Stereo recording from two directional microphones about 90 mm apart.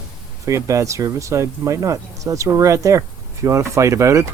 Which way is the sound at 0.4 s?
35° right (ahead or behind).